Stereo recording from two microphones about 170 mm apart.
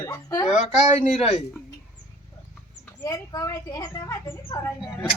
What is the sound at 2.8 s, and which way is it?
Speech, 20° left (ahead or behind).